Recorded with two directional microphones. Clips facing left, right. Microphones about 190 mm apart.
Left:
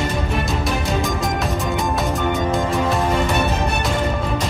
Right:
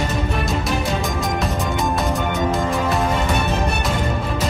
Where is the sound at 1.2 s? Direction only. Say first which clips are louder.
Even; centre (ahead or behind).